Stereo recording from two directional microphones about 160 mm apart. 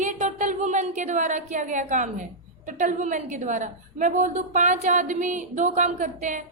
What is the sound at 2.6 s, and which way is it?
A woman's voice, 50° right (ahead or behind).